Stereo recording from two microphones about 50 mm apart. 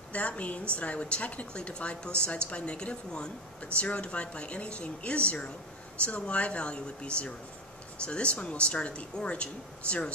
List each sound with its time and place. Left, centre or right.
0.1 s a woman's voice: left